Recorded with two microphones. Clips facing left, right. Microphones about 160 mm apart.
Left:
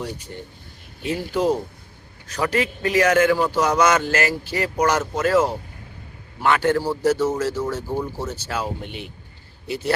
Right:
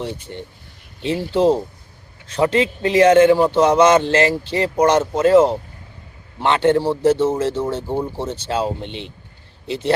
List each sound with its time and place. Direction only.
0.0 s a man's voice: 25° right (ahead or behind)